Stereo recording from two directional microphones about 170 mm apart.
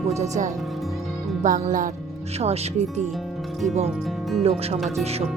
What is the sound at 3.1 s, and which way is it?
Music, centre (ahead or behind).